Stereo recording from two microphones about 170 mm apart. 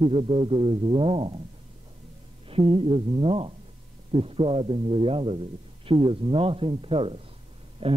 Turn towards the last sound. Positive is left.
turn(degrees=-35)  # may be behind; listen again after turning